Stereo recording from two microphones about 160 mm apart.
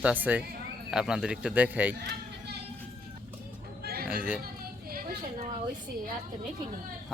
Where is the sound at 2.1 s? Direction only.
90° right.